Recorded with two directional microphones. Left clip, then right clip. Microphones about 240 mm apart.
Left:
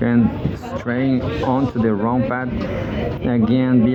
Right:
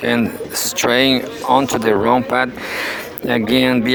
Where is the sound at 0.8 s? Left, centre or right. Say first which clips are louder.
Right 8 dB; right.